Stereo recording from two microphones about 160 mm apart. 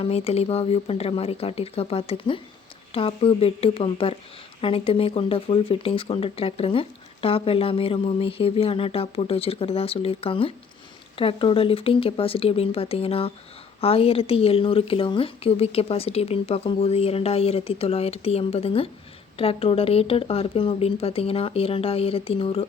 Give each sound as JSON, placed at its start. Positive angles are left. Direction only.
{"t": 0.0, "sound": "speech", "side_deg": 40}